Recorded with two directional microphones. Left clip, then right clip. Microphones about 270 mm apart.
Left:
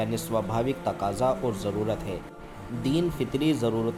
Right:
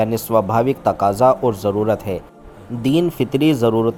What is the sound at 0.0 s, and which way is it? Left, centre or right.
Speech, right.